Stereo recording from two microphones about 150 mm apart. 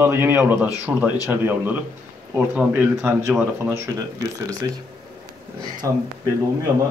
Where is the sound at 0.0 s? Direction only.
15° right (ahead or behind).